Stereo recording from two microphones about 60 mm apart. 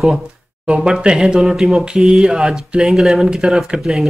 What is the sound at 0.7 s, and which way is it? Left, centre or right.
Speech, centre.